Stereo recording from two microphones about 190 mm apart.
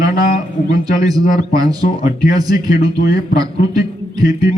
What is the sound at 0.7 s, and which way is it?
A man's voice, 20° right (ahead or behind).